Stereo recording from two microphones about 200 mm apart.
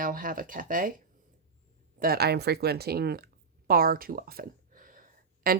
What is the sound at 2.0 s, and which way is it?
Speech, 50° right (ahead or behind).